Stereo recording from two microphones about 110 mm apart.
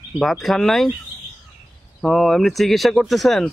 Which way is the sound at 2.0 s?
5° left (ahead or behind).